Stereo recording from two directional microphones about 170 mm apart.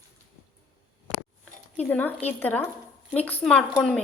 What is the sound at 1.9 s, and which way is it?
A woman's voice, 10° left (ahead or behind).